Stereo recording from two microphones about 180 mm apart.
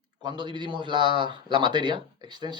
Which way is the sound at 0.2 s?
25° right (ahead or behind).